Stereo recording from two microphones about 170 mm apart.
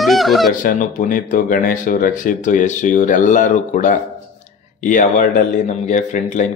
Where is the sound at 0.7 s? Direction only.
50° left (ahead or behind).